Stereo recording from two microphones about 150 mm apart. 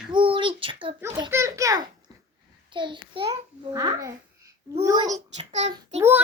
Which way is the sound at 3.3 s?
20° right (ahead or behind).